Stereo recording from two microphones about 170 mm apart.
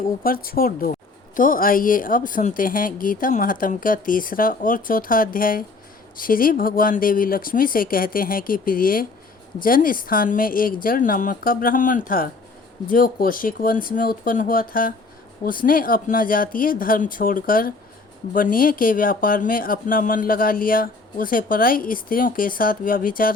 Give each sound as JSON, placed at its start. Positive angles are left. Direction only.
{"t": 0.2, "sound": "speech", "side_deg": 60}